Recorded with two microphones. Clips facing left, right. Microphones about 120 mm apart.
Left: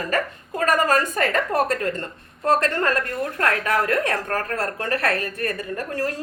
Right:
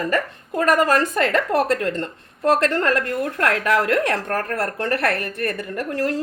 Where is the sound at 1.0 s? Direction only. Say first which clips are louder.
Right 2 dB; 90° right.